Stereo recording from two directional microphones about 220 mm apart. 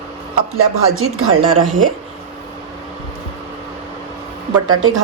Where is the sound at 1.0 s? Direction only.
70° right (ahead or behind).